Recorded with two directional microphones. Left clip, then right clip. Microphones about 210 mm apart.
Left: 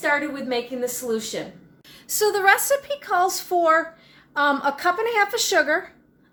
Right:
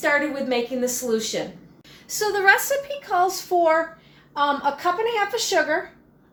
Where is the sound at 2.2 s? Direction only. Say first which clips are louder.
Left 2 dB; 40° left (ahead or behind).